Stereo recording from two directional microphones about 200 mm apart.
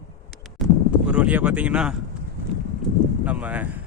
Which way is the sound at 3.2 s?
5° right (ahead or behind).